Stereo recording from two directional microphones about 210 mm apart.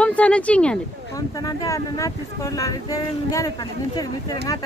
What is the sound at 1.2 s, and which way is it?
Speech, 15° left (ahead or behind).